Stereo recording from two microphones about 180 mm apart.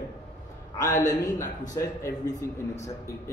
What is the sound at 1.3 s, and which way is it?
Speech, 20° left (ahead or behind).